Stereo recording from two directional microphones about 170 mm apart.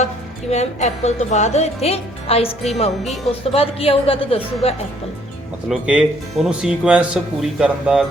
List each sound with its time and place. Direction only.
0.5 s speech: 40° left (ahead or behind)
5.6 s speech: 5° right (ahead or behind)